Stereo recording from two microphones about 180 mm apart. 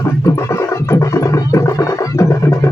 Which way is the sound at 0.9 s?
15° left (ahead or behind).